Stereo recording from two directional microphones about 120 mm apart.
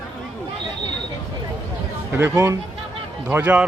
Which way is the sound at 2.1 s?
15° right (ahead or behind).